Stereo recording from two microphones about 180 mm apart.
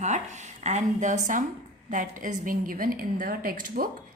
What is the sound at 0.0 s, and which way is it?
A woman's voice, 40° right (ahead or behind).